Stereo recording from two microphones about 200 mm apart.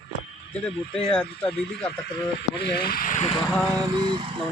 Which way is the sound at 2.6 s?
55° left (ahead or behind).